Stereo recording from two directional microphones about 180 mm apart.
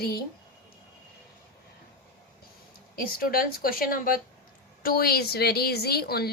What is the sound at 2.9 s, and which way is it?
A woman's voice, 55° left (ahead or behind).